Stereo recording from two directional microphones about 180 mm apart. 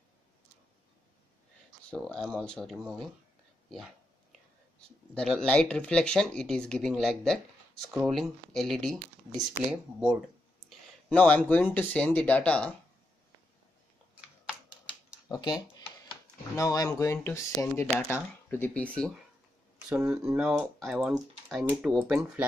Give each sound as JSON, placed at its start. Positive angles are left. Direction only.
{"t": 1.9, "sound": "speech", "side_deg": 5}
{"t": 5.1, "sound": "speech", "side_deg": 5}
{"t": 15.2, "sound": "speech", "side_deg": 20}